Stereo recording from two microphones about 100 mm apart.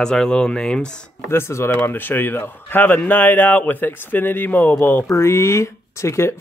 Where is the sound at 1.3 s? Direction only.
25° left (ahead or behind).